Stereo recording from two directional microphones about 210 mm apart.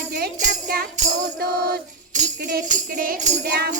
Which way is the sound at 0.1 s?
40° right (ahead or behind).